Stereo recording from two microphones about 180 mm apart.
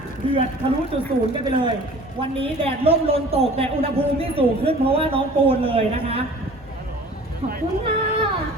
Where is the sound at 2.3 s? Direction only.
30° right (ahead or behind).